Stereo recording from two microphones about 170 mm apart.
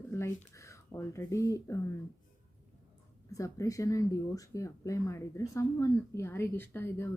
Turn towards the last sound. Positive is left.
turn(degrees=15)  # may be behind; listen again after turning